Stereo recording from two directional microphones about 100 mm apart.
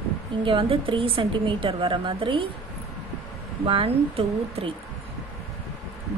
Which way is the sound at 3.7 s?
65° right (ahead or behind).